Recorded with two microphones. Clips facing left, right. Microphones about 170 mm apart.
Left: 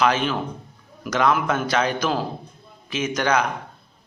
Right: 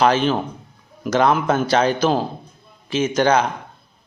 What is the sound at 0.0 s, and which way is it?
A man's voice, 35° right (ahead or behind).